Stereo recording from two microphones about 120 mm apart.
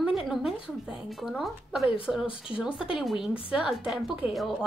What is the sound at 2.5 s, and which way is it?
Speech, 45° left (ahead or behind).